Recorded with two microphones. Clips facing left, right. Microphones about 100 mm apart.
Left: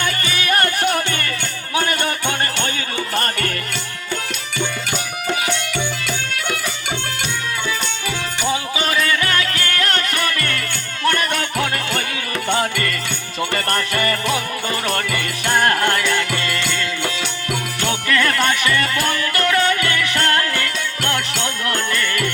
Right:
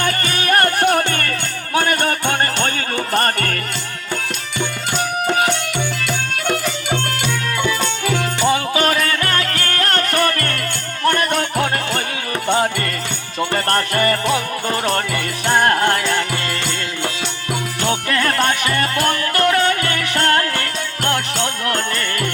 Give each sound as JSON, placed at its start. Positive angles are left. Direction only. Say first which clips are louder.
{"t": 0.0, "sound": "music", "louder": "right 2 dB", "side_deg": -45}
{"t": 5.2, "sound": "music", "louder": "right 4 dB", "side_deg": -45}
{"t": 8.4, "sound": "music", "louder": "right 4 dB", "side_deg": -55}
{"t": 13.4, "sound": "music", "louder": "right 3 dB", "side_deg": -30}